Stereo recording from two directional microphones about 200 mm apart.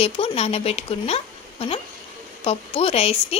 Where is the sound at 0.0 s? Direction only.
30° left (ahead or behind).